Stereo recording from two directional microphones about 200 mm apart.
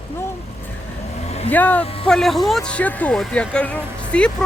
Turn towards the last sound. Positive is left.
turn(degrees=5)  # may be behind; listen again after turning